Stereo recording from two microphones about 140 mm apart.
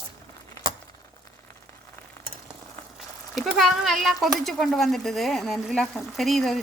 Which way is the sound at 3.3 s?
Centre (ahead or behind).